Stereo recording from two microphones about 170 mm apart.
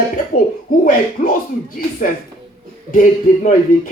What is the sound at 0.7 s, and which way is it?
Speech, 55° left (ahead or behind).